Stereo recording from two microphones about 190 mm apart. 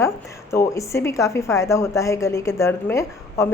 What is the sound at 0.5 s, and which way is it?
A woman's voice, 15° left (ahead or behind).